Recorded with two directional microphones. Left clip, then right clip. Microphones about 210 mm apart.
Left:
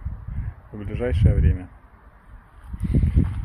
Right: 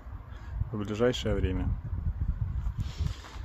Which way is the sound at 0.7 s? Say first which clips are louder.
Even; 20° right (ahead or behind).